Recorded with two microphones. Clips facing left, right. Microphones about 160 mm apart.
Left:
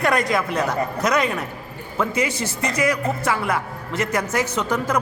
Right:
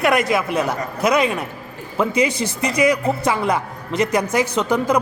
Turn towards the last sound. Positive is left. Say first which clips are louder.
# right 4 dB
turn(degrees=-15)  # may be behind; listen again after turning